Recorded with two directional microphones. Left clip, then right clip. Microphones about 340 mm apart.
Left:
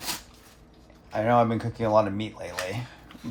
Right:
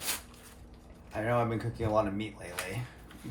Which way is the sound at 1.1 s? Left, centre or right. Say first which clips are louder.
Left 8 dB; left.